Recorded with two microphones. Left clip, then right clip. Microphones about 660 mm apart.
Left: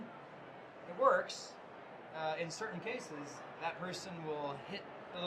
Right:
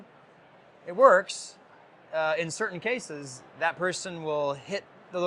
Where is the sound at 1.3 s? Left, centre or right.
Right.